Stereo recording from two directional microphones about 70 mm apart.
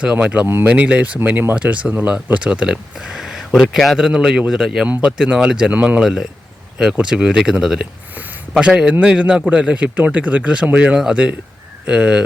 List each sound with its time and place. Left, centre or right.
0.0 s speech: centre
4.9 s speech: right
6.0 s speech: centre